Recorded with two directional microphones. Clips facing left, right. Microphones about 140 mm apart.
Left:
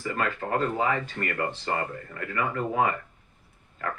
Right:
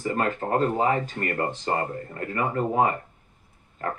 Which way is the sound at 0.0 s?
40° right (ahead or behind).